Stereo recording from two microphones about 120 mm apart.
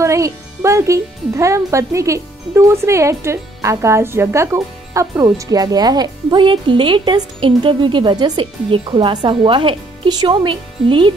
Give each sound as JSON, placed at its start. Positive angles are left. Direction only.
{"t": 0.0, "sound": "speech", "side_deg": -25}